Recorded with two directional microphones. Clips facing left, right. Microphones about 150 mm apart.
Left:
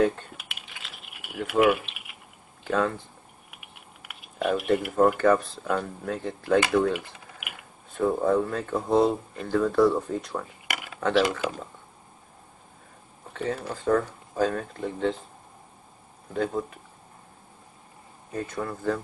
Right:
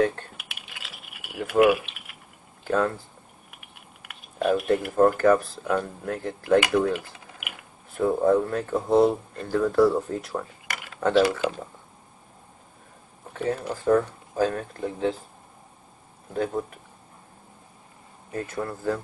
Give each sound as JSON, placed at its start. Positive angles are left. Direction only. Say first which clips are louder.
{"t": 0.0, "sound": "coin", "louder": "even", "side_deg": 0}
{"t": 2.6, "sound": "speech", "louder": "right 1 dB", "side_deg": 0}
{"t": 4.0, "sound": "speech", "louder": "right 2 dB", "side_deg": 5}
{"t": 6.9, "sound": "speech", "louder": "right 1 dB", "side_deg": 0}
{"t": 13.3, "sound": "speech", "louder": "right 3 dB", "side_deg": -10}
{"t": 18.3, "sound": "speech", "louder": "right 1 dB", "side_deg": 0}